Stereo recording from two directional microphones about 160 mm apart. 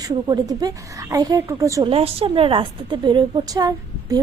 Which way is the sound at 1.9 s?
35° right (ahead or behind).